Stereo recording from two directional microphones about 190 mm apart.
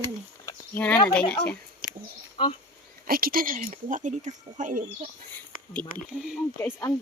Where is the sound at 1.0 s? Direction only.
10° left (ahead or behind).